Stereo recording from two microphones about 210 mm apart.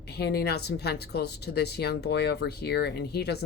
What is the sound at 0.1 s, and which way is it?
Speech, 50° left (ahead or behind).